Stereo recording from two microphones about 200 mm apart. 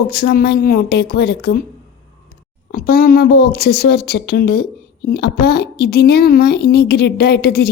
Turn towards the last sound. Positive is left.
turn(degrees=50)  # may be behind; listen again after turning